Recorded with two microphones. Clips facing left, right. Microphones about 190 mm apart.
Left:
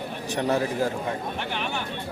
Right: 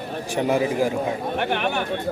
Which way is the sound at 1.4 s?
60° right (ahead or behind).